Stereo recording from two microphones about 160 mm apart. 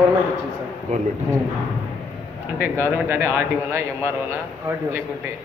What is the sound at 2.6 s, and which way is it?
A man's voice, 15° right (ahead or behind).